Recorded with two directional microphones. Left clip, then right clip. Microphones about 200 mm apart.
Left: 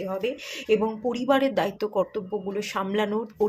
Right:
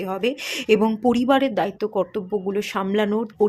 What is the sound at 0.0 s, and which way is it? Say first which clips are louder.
Speech: right 5 dB; 45° right (ahead or behind).